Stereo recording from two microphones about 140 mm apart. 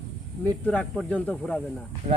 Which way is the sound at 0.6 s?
10° left (ahead or behind).